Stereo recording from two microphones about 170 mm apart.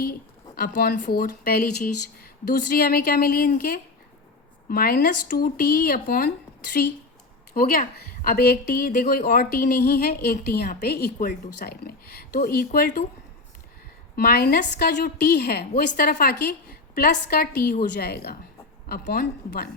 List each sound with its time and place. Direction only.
0.0 s a woman's voice: 65° left (ahead or behind)
7.5 s a woman's voice: 60° left (ahead or behind)
14.2 s a woman's voice: 65° left (ahead or behind)